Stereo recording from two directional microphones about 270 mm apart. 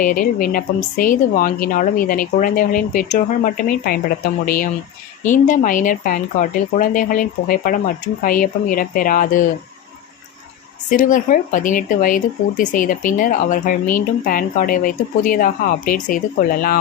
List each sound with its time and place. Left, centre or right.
0.0 s a woman's voice: left
10.8 s speech: left